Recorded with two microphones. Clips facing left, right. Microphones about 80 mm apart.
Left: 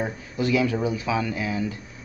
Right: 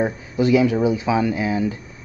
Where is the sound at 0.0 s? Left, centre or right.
Right.